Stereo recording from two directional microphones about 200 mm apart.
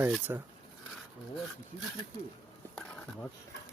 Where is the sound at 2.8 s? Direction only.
5° left (ahead or behind).